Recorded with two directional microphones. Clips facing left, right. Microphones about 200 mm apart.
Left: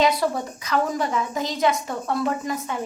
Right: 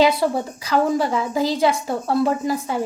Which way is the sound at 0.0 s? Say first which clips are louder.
Right 4 dB; 30° right (ahead or behind).